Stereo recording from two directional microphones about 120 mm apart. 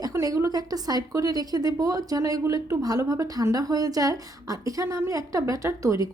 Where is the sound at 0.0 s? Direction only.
30° right (ahead or behind).